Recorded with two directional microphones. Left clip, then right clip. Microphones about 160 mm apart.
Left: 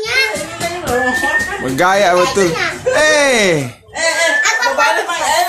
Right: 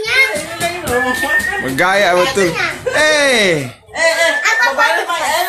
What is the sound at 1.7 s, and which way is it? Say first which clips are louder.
Speech: left 1 dB; 10° left (ahead or behind).